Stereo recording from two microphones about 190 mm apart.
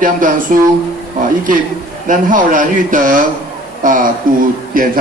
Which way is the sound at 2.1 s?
45° right (ahead or behind).